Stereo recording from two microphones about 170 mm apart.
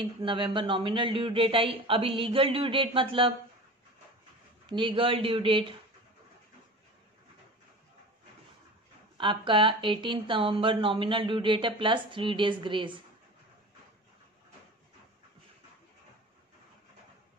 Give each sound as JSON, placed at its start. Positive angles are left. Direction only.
{"t": 0.0, "sound": "speech", "side_deg": -30}
{"t": 4.6, "sound": "speech", "side_deg": -30}
{"t": 9.2, "sound": "speech", "side_deg": -30}